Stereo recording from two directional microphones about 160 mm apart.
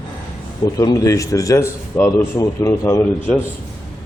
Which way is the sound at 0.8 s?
20° left (ahead or behind).